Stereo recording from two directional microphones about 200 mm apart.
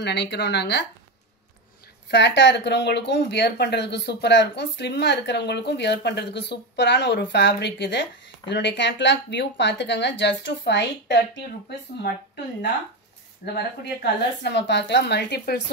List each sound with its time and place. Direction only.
0.0 s speech: 60° left (ahead or behind)
2.0 s speech: 60° left (ahead or behind)
13.4 s speech: 45° left (ahead or behind)
14.4 s speech: 60° left (ahead or behind)